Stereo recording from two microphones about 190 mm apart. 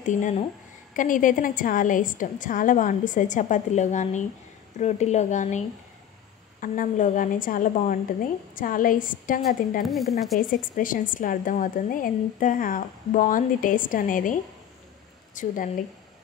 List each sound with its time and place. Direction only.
0.0 s speech: 40° left (ahead or behind)
9.8 s speech: centre (ahead or behind)
10.5 s speech: 45° left (ahead or behind)